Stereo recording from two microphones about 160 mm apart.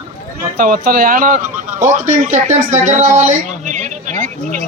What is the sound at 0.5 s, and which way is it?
A man's voice, 60° right (ahead or behind).